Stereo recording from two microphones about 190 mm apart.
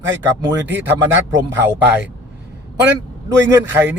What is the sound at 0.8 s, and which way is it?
Speech, 70° right (ahead or behind).